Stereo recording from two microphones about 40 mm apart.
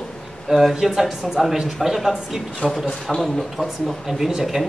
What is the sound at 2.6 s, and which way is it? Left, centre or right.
Speech, centre.